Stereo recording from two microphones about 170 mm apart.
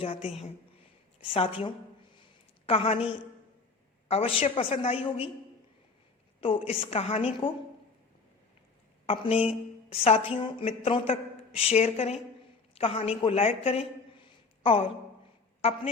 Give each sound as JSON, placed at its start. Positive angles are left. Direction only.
{"t": 0.0, "sound": "speech", "side_deg": 35}
{"t": 4.1, "sound": "speech", "side_deg": 35}
{"t": 6.4, "sound": "speech", "side_deg": 35}
{"t": 9.0, "sound": "speech", "side_deg": 35}